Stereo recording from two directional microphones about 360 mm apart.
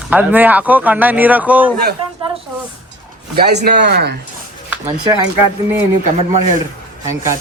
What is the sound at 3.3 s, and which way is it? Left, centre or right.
Speech, right.